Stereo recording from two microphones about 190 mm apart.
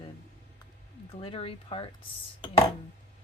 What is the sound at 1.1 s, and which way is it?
Speech, 30° left (ahead or behind).